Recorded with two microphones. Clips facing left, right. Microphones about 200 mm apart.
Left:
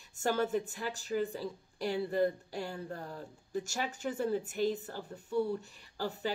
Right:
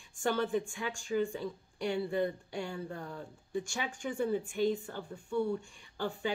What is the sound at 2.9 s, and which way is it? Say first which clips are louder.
Speech: even; 35° left (ahead or behind).